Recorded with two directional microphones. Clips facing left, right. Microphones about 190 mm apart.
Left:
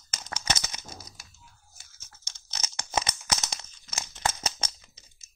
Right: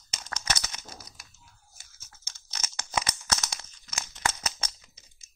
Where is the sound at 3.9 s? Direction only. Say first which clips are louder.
Left 1 dB; 30° left (ahead or behind).